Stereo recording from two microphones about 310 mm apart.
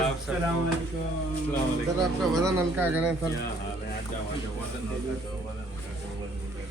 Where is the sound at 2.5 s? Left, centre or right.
Centre.